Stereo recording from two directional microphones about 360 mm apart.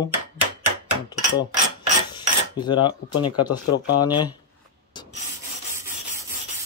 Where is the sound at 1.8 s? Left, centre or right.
Centre.